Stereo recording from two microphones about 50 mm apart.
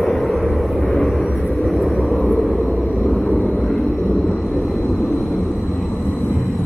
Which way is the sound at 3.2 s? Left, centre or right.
Left.